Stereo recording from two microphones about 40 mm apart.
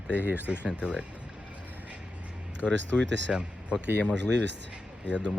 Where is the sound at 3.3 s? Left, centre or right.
Right.